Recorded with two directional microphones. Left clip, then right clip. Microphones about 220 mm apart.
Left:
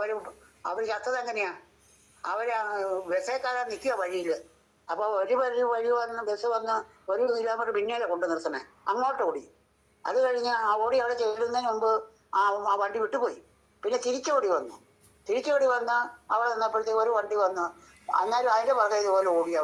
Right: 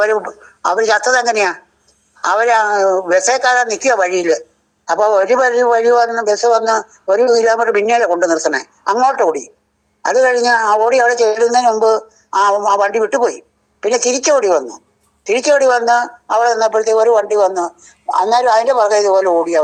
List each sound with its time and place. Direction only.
0.6 s speech: 45° right (ahead or behind)